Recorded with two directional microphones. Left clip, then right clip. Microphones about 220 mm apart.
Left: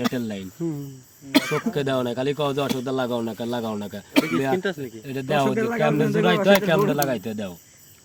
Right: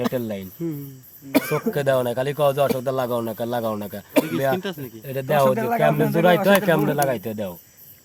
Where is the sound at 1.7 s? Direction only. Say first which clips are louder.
Right 4 dB; 55° right (ahead or behind).